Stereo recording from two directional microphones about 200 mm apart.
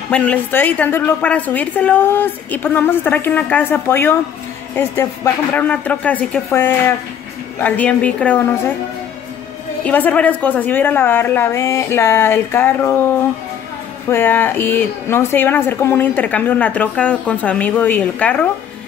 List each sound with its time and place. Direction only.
0.1 s speech: 5° left (ahead or behind)
9.8 s speech: 10° left (ahead or behind)